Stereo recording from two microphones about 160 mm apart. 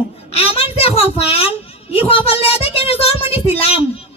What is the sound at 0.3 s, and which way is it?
A child's voice, 40° left (ahead or behind).